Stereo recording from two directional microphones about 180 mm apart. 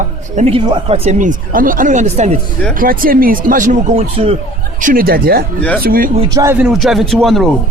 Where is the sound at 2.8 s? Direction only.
50° right (ahead or behind); by 4.3 s 30° right (ahead or behind).